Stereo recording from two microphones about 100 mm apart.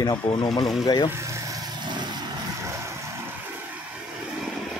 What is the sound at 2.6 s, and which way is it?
Vehicle, 30° right (ahead or behind).